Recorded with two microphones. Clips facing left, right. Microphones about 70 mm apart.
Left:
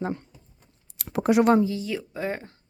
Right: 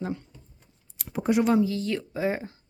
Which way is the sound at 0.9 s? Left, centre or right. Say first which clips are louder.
Left 3 dB; left.